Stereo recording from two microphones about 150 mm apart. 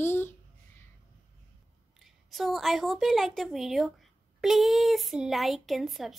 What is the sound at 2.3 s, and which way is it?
Speech, centre (ahead or behind).